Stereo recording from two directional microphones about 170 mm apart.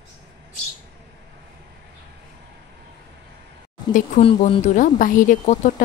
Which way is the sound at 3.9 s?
50° left (ahead or behind).